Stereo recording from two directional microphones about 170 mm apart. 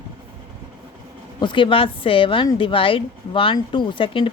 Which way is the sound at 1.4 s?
30° left (ahead or behind).